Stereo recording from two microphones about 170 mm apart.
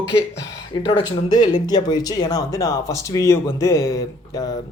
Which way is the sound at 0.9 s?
25° left (ahead or behind).